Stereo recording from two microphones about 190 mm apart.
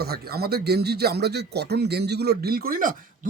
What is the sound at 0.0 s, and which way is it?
Speech, 55° right (ahead or behind).